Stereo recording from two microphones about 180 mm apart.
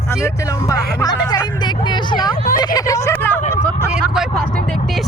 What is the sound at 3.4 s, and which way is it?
Speech, 40° left (ahead or behind).